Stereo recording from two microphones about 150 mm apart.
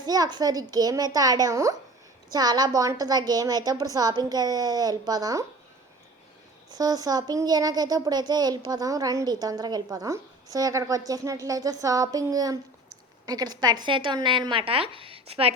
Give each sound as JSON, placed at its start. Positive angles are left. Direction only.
{"t": 0.0, "sound": "a child's voice", "side_deg": -25}
{"t": 6.7, "sound": "a child's voice", "side_deg": -25}